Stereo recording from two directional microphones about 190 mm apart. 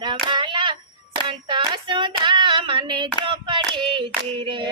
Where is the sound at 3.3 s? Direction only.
25° right (ahead or behind).